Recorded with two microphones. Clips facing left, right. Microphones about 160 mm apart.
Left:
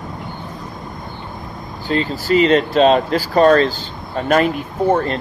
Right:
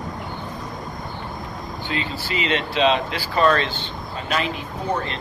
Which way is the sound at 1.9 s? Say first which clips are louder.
Left 11 dB; 40° left (ahead or behind).